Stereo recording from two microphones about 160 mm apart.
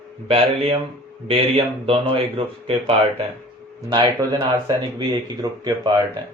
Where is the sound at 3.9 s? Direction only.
25° right (ahead or behind).